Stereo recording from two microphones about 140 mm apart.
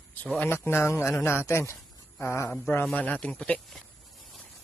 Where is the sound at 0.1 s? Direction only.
10° left (ahead or behind).